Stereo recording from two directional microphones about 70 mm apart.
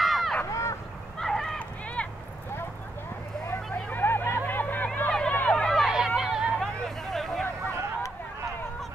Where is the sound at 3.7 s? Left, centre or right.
Left.